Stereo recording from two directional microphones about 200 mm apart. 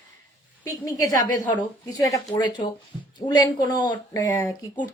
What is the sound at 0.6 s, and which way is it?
A woman's voice, 15° left (ahead or behind).